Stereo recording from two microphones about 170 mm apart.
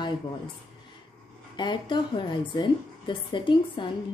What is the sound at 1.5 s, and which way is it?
A woman's voice, 25° left (ahead or behind).